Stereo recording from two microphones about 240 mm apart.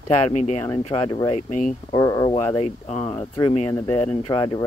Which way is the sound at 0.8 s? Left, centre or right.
Left.